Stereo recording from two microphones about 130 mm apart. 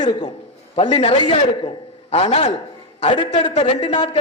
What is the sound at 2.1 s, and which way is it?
Speech, 55° left (ahead or behind).